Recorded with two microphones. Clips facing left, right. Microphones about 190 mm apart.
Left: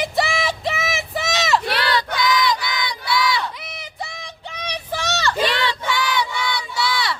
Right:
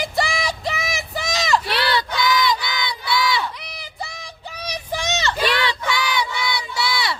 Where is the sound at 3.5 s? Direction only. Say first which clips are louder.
Left 1 dB; centre (ahead or behind); by 5.3 s 20° right (ahead or behind).